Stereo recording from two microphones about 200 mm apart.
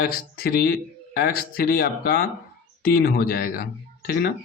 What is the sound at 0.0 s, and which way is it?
Speech, 50° left (ahead or behind).